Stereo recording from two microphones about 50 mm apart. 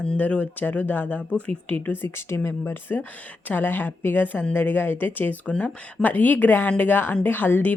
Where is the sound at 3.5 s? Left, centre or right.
Left.